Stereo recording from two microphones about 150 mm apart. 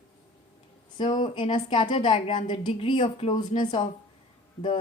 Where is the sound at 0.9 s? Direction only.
30° left (ahead or behind).